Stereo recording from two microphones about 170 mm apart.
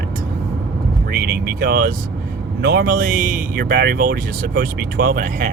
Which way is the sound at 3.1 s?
50° right (ahead or behind).